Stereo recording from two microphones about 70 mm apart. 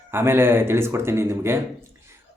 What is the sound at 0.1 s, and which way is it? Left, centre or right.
Speech, right.